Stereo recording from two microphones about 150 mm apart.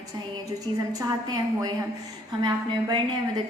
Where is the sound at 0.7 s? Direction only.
25° right (ahead or behind).